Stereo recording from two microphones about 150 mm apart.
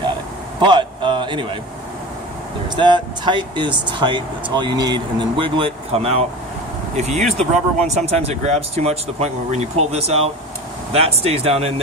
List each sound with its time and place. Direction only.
0.6 s speech: 30° right (ahead or behind)
2.7 s speech: 30° right (ahead or behind)